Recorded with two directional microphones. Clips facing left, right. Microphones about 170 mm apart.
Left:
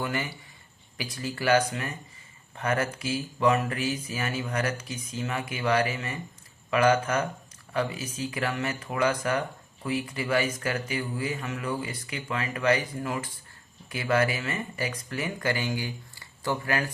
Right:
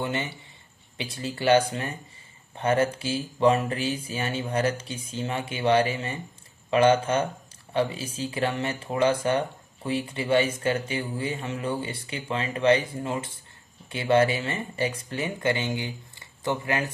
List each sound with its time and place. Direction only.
0.0 s speech: 25° right (ahead or behind)